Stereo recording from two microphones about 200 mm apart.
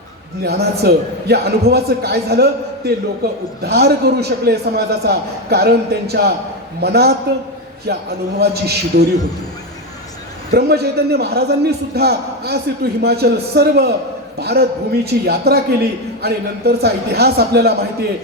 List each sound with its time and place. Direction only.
0.4 s a man's voice: 55° right (ahead or behind)
10.5 s a man's voice: 55° right (ahead or behind)